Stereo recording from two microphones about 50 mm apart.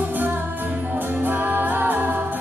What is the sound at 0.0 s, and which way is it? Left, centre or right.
Music, right.